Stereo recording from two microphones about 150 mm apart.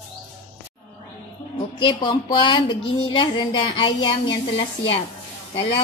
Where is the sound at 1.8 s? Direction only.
30° left (ahead or behind).